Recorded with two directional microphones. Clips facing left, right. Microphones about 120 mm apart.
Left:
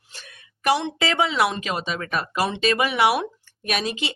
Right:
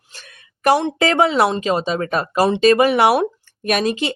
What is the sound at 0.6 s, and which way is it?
Speech, 45° right (ahead or behind).